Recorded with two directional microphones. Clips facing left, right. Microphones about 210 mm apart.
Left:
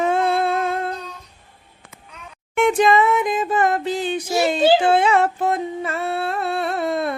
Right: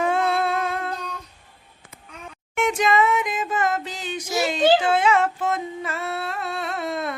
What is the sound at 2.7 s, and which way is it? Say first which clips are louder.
Music: left 3 dB; 35° left (ahead or behind).